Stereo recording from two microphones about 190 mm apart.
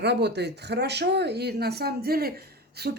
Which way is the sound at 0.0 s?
60° right (ahead or behind).